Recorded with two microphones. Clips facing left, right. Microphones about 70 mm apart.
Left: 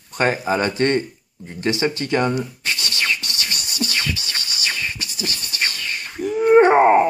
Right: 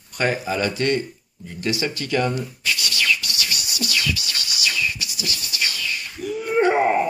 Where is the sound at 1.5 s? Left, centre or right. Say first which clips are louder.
Left 4 dB; left.